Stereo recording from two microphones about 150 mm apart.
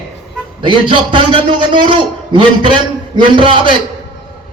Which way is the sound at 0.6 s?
35° right (ahead or behind).